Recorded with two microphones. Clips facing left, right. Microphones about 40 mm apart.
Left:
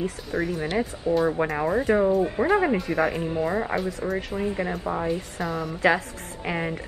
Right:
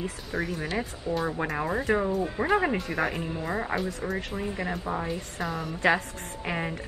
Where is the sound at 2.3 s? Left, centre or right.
Centre.